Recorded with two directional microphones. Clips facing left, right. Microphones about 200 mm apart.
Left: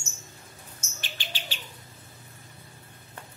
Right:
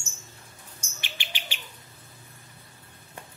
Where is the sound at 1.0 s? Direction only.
15° right (ahead or behind).